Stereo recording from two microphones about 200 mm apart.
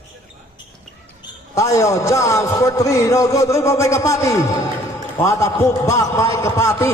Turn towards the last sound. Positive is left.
turn(degrees=15)  # may be behind; listen again after turning